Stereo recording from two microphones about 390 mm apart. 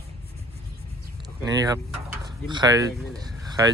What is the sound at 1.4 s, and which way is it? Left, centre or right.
Speech, centre.